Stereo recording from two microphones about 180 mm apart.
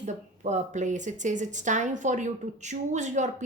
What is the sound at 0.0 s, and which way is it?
A woman's voice, 40° right (ahead or behind).